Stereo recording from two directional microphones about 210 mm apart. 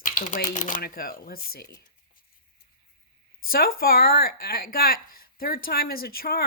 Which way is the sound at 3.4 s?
45° left (ahead or behind).